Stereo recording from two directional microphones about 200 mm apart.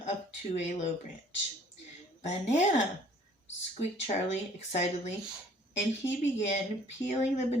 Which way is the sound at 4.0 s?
35° left (ahead or behind).